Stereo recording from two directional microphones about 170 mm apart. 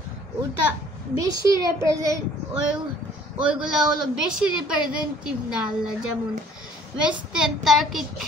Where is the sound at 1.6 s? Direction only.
20° right (ahead or behind).